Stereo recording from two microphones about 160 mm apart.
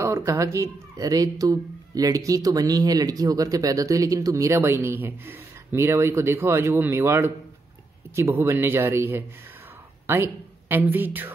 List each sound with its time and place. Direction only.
0.0 s a man's voice: 15° right (ahead or behind)